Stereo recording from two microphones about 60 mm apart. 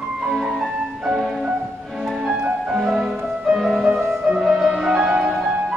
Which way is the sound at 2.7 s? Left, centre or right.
Centre.